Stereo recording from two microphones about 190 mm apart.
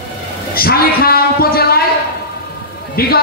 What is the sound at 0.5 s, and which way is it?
A man's voice, 50° left (ahead or behind).